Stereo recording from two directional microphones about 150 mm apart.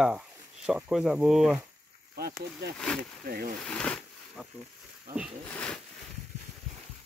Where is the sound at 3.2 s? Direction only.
75° right (ahead or behind).